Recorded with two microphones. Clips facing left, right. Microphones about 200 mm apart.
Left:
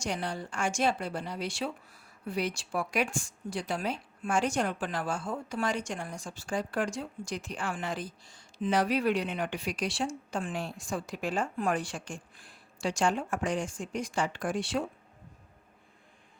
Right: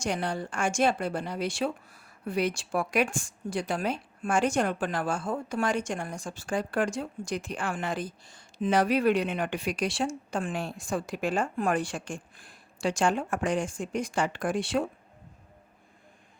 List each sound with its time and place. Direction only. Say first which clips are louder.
0.0 s a woman's voice: right 4 dB; 50° right (ahead or behind)